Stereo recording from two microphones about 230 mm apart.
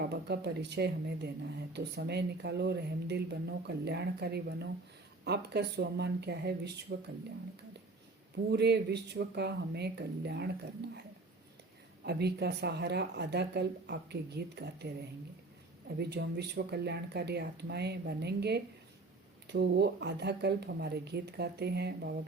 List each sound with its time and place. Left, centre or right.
0.0 s speech: right
8.4 s speech: right
12.0 s speech: right